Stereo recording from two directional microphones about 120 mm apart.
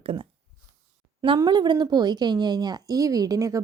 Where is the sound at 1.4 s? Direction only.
35° right (ahead or behind).